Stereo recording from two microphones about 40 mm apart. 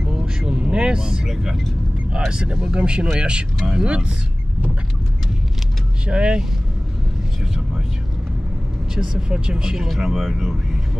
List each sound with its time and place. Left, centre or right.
0.1 s vehicle: right
2.1 s speech: right
6.0 s speech: right
8.9 s speech: centre